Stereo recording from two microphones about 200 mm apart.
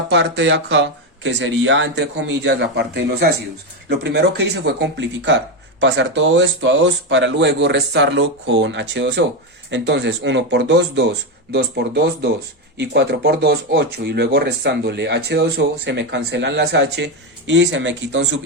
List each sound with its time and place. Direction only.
0.1 s speech: 60° right (ahead or behind)